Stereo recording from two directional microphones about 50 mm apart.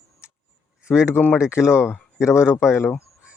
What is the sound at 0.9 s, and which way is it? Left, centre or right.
Speech, left.